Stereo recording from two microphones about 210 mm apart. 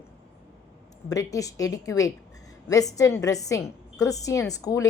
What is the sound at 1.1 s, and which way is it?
Speech, 15° left (ahead or behind).